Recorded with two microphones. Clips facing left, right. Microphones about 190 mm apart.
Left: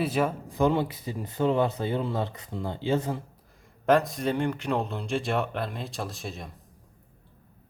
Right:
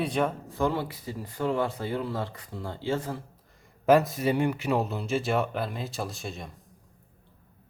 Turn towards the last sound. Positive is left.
turn(degrees=0)  # may be behind; listen again after turning